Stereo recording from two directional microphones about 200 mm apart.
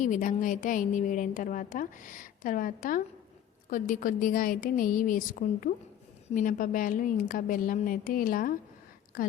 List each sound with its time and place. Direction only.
0.0 s a woman's voice: 40° left (ahead or behind)